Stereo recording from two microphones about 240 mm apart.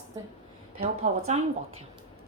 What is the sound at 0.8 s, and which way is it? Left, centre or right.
Speech, right.